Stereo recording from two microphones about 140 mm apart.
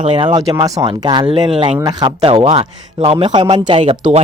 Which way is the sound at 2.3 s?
45° right (ahead or behind).